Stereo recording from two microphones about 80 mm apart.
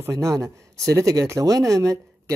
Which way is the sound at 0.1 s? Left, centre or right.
Right.